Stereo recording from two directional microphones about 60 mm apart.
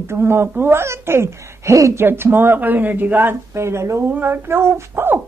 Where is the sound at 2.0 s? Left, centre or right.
Right.